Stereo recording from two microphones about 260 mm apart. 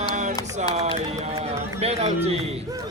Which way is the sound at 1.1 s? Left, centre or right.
Right.